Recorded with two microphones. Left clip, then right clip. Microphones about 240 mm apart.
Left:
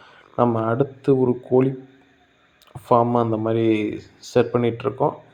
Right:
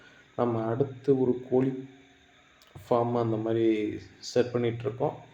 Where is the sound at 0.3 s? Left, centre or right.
Left.